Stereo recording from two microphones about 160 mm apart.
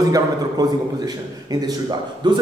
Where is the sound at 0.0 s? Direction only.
25° right (ahead or behind).